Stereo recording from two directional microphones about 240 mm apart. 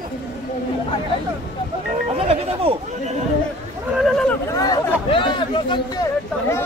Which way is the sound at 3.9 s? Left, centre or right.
Centre.